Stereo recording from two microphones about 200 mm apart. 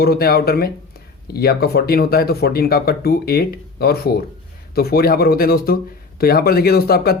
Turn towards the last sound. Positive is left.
turn(degrees=50)  # may be behind; listen again after turning